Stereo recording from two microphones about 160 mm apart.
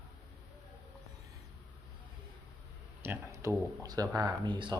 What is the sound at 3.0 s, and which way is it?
Speech, 15° right (ahead or behind).